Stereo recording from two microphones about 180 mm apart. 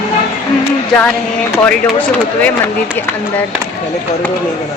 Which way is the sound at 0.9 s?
5° left (ahead or behind).